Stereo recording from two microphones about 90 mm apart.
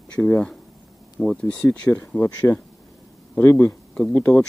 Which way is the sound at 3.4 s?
30° left (ahead or behind).